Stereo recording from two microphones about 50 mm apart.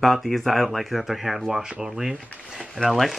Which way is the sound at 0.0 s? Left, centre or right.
Centre.